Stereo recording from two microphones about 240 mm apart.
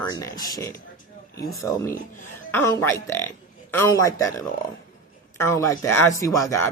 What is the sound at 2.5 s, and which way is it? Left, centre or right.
Speech, centre.